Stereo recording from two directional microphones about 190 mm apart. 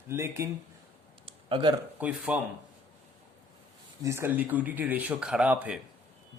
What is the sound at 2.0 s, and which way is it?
Speech, 5° right (ahead or behind).